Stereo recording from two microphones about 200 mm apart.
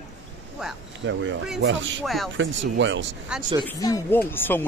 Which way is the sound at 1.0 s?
70° right (ahead or behind).